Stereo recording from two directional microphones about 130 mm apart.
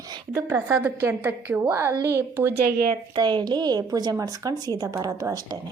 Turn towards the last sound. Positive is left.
turn(degrees=-30)  # may be behind; listen again after turning